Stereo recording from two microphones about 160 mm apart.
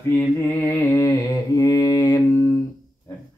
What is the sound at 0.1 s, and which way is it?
Mantra, 15° left (ahead or behind).